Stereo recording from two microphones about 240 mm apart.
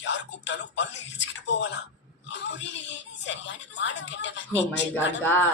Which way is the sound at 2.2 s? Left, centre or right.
Left.